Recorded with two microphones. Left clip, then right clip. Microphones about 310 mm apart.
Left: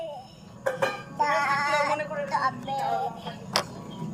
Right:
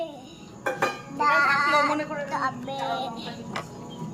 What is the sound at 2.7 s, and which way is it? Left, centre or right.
Music, right.